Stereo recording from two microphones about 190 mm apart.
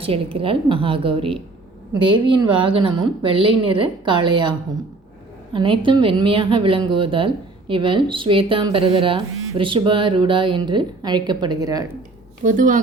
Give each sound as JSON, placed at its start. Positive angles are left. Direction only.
{"t": 0.3, "sound": "a woman's voice", "side_deg": -30}
{"t": 5.5, "sound": "a woman's voice", "side_deg": -25}
{"t": 12.4, "sound": "speech", "side_deg": -40}